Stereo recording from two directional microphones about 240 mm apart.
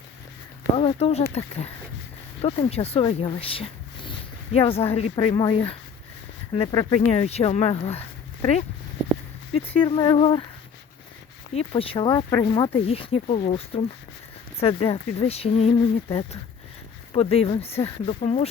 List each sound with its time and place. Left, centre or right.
0.8 s speech: left
9.7 s speech: centre
11.5 s speech: left